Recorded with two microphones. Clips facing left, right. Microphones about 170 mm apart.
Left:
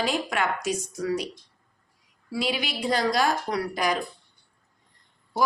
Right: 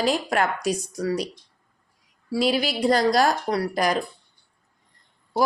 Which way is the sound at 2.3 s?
35° right (ahead or behind).